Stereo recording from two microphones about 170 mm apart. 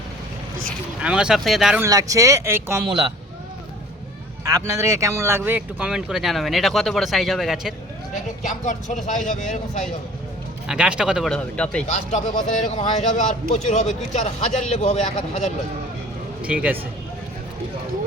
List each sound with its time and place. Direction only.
1.0 s speech: 5° right (ahead or behind)
1.8 s speech: 20° right (ahead or behind)
4.4 s speech: 20° right (ahead or behind); by 7.7 s centre (ahead or behind)
8.4 s a man's voice: 45° left (ahead or behind)
10.7 s speech: 5° right (ahead or behind)
11.9 s a man's voice: 45° left (ahead or behind)
16.4 s speech: 10° right (ahead or behind)